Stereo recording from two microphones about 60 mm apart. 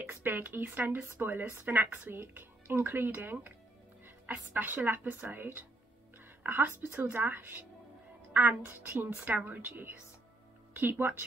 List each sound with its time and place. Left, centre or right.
0.2 s speech: right
4.6 s speech: right